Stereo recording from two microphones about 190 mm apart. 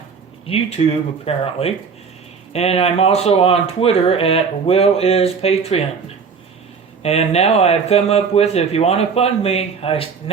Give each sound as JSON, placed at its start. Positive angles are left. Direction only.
{"t": 0.4, "sound": "speech", "side_deg": 30}
{"t": 7.0, "sound": "speech", "side_deg": 35}